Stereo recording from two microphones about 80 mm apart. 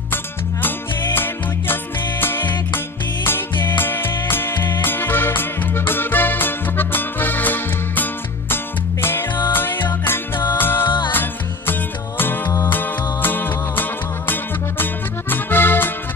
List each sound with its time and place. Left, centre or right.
0.1 s music: left
3.7 s music: left
12.7 s music: left